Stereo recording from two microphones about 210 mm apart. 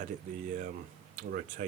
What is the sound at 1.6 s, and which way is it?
Speech, 40° right (ahead or behind).